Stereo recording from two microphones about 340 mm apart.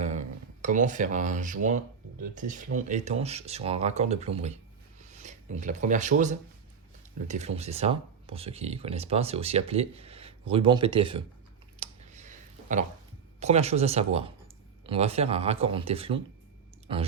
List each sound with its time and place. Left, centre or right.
0.0 s speech: right
4.9 s a sound: right
7.3 s speech: centre
11.8 s clicking: right
13.4 s speech: centre